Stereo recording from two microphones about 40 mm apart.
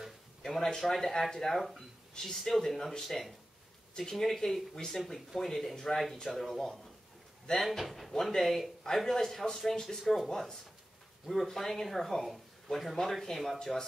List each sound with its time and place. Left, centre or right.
0.4 s a sound: centre
0.7 s speech: centre
0.9 s speech: centre
10.0 s speech: centre
13.6 s speech: centre